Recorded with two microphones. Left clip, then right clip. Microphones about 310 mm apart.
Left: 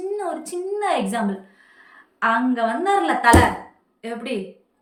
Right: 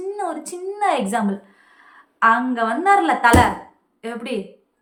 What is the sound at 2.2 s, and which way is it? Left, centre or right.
A woman's voice, centre.